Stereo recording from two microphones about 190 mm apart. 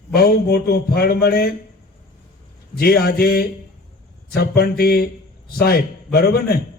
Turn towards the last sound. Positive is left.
turn(degrees=55)  # may be behind; listen again after turning